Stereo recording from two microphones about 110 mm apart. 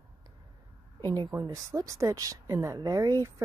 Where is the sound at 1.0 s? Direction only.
35° right (ahead or behind).